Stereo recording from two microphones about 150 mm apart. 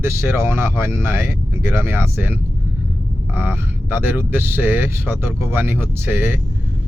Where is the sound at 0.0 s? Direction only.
15° right (ahead or behind).